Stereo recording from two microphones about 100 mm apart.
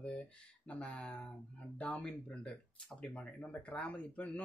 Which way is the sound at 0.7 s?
10° left (ahead or behind).